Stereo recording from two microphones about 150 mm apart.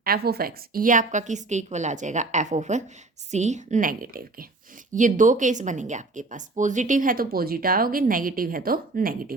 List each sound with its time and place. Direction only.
0.0 s speech: 90° right; by 4.4 s 75° right (ahead or behind)
4.9 s speech: 60° right (ahead or behind)